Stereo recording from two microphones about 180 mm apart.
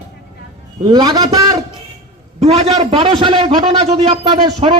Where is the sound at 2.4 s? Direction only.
35° right (ahead or behind).